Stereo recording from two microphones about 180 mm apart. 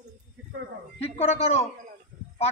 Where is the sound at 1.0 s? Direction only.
35° left (ahead or behind).